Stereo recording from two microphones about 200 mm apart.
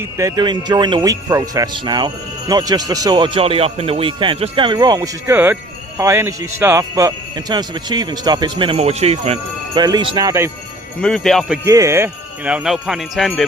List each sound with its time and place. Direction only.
0.0 s speech: 15° right (ahead or behind)
11.0 s speech: centre (ahead or behind)
11.6 s speech: 15° right (ahead or behind); by 13.5 s centre (ahead or behind)